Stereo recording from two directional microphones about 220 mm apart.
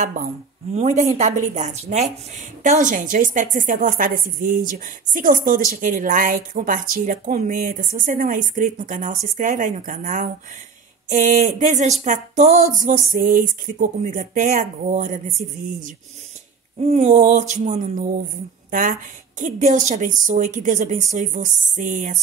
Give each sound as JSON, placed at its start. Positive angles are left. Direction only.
{"t": 0.0, "sound": "a woman's voice", "side_deg": -35}